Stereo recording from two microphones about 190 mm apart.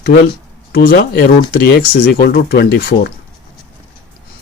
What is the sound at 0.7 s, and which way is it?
Speech, 55° left (ahead or behind).